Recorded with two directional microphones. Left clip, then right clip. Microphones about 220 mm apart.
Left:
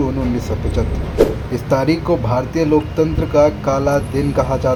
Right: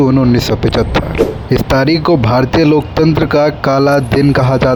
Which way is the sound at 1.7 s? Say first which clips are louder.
Right 4 dB; 45° right (ahead or behind).